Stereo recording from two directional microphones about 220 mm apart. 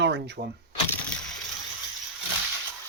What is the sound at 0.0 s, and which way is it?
Speech, 50° right (ahead or behind).